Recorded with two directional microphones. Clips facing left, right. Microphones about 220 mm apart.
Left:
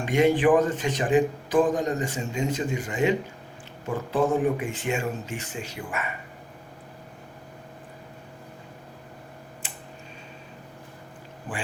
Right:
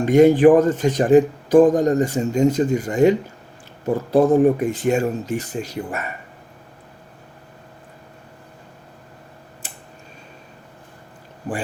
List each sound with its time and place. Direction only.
0.0 s speech: 40° right (ahead or behind)
9.6 s tick-tock: 40° right (ahead or behind)